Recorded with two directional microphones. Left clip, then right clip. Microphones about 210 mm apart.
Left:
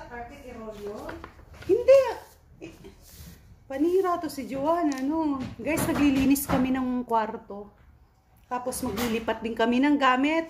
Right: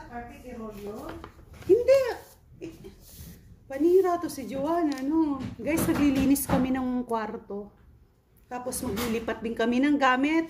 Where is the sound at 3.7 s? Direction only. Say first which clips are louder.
Right 2 dB; centre (ahead or behind).